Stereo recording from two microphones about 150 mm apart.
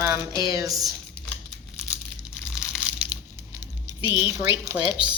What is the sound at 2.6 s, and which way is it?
Crushing, 5° right (ahead or behind).